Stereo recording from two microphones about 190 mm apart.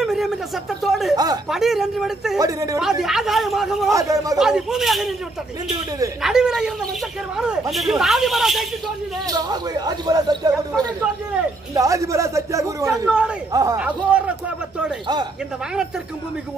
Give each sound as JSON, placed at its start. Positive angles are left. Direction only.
{"t": 0.0, "sound": "a sound", "side_deg": 0}
{"t": 1.1, "sound": "a sound", "side_deg": -20}
{"t": 1.5, "sound": "speech", "side_deg": 0}
{"t": 2.3, "sound": "speech", "side_deg": -20}
{"t": 2.8, "sound": "speech", "side_deg": 0}
{"t": 3.9, "sound": "a man's voice", "side_deg": -20}
{"t": 4.4, "sound": "speech", "side_deg": -5}
{"t": 6.2, "sound": "speech", "side_deg": -5}
{"t": 7.7, "sound": "speech", "side_deg": 0}
{"t": 9.3, "sound": "speech", "side_deg": -20}
{"t": 11.7, "sound": "speech", "side_deg": -15}
{"t": 13.7, "sound": "speech", "side_deg": -5}